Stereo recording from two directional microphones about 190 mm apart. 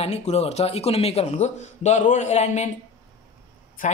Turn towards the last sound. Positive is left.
turn(degrees=45)  # may be behind; listen again after turning